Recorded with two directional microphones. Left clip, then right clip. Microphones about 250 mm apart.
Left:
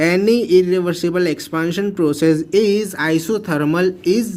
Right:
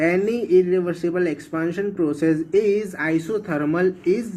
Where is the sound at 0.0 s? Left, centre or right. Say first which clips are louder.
Left 5 dB; left.